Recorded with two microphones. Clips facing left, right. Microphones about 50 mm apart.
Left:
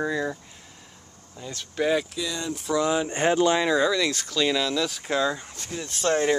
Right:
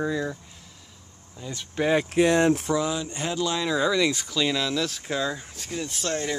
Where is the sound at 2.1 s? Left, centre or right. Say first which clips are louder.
Right 11 dB; right.